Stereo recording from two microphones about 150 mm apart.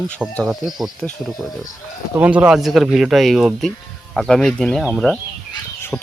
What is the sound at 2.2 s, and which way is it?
Speech, 10° right (ahead or behind).